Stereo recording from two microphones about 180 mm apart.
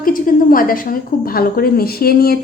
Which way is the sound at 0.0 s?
50° left (ahead or behind).